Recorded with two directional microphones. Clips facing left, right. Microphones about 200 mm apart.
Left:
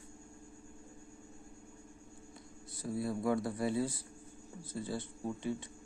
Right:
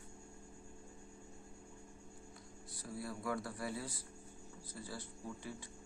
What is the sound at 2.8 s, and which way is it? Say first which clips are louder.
Speech: left 9 dB; 25° left (ahead or behind).